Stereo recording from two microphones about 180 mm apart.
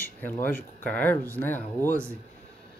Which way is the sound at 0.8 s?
10° left (ahead or behind).